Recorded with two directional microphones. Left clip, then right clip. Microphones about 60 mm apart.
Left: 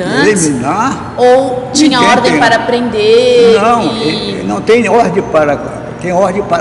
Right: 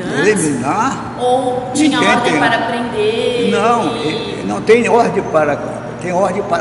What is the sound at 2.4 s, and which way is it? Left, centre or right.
A woman's voice, left.